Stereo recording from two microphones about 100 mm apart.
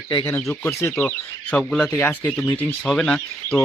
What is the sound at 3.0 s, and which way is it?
Speech, 10° left (ahead or behind).